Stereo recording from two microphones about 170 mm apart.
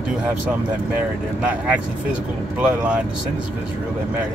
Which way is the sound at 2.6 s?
5° right (ahead or behind).